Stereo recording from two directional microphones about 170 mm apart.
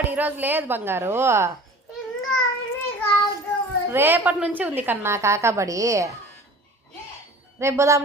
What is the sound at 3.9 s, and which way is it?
A woman's voice, 10° right (ahead or behind).